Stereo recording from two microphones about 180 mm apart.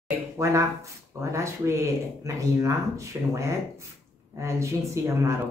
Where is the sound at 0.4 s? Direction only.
15° right (ahead or behind).